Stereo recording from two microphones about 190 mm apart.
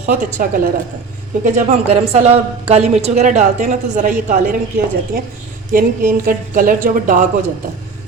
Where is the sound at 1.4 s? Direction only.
35° right (ahead or behind).